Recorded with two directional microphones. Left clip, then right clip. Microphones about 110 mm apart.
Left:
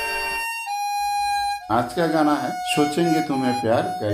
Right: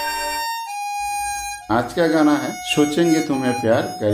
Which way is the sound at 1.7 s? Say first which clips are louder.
Right 5 dB; 15° right (ahead or behind).